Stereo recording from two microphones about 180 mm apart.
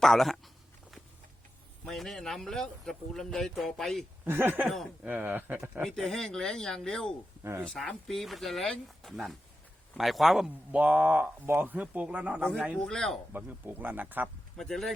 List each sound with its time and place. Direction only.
0.0 s a sound: centre (ahead or behind)
1.8 s a man's voice: centre (ahead or behind)
4.2 s speech: 10° right (ahead or behind)
5.8 s a man's voice: centre (ahead or behind)
12.8 s a man's voice: 5° left (ahead or behind)
13.3 s speech: 10° right (ahead or behind)
14.5 s a man's voice: centre (ahead or behind)